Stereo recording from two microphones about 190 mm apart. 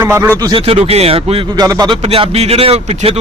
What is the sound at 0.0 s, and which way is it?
Speech, 15° right (ahead or behind).